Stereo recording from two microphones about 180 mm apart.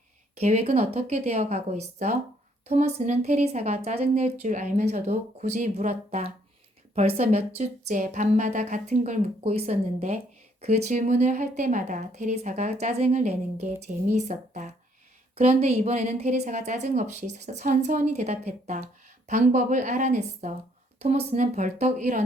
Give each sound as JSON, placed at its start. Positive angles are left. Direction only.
{"t": 0.3, "sound": "a woman's voice", "side_deg": -35}